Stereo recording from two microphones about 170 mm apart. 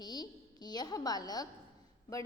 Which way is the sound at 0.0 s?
25° left (ahead or behind).